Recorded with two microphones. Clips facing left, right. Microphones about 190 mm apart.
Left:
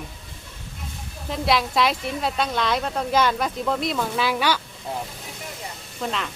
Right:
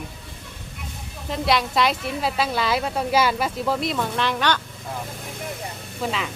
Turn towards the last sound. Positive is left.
turn(degrees=-5)  # may be behind; listen again after turning